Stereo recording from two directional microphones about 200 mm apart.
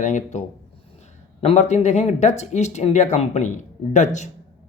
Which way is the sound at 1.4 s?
35° left (ahead or behind).